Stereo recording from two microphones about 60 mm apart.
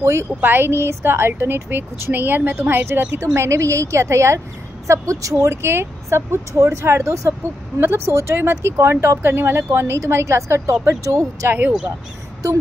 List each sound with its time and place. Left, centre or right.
0.0 s speech: right
0.4 s a woman's voice: right
3.3 s speech: right
7.8 s a woman's voice: right
8.1 s speech: right
11.4 s a woman's voice: right